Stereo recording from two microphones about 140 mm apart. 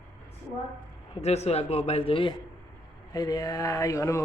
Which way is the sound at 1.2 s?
50° left (ahead or behind).